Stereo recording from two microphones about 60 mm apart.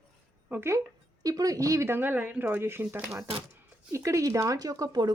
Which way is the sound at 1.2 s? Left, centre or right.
Right.